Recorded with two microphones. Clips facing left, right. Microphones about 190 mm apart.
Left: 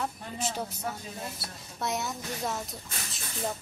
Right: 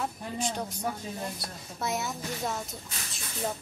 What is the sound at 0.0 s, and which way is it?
Speech, 5° left (ahead or behind).